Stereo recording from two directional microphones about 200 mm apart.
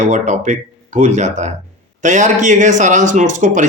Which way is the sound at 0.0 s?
35° right (ahead or behind).